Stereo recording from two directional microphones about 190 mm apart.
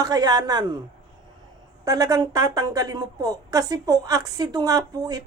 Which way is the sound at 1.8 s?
20° right (ahead or behind).